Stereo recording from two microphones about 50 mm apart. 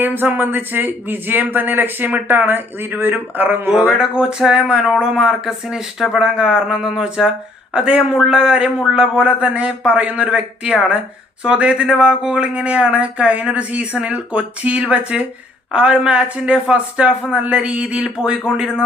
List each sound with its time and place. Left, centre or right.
0.0 s speech: right
3.7 s speech: centre